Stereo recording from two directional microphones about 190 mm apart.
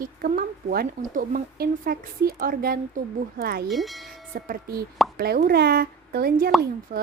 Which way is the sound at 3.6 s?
Centre (ahead or behind).